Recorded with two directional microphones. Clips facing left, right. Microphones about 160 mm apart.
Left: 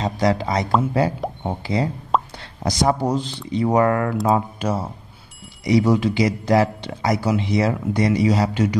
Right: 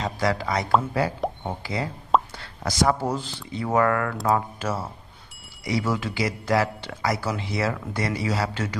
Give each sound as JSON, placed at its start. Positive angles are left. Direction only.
{"t": 0.0, "sound": "speech", "side_deg": 20}
{"t": 2.1, "sound": "plop", "side_deg": 0}
{"t": 2.6, "sound": "speech", "side_deg": 20}